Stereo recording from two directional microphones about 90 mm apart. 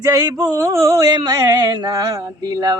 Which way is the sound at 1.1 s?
55° right (ahead or behind).